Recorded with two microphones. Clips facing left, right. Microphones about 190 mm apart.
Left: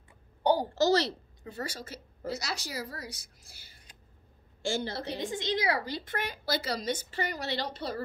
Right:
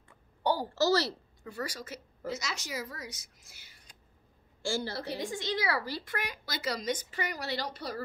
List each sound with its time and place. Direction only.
0.4 s a woman's voice: 15° left (ahead or behind)
4.6 s a woman's voice: 20° left (ahead or behind)